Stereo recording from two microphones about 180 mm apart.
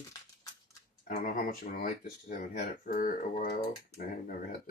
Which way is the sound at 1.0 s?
50° left (ahead or behind).